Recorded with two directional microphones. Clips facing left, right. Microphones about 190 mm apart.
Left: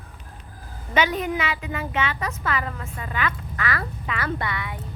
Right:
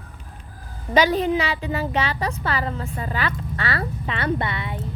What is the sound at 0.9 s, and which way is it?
Speech, 30° right (ahead or behind).